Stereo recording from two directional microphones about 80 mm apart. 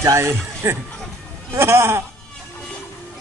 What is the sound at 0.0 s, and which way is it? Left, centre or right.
Speech, right.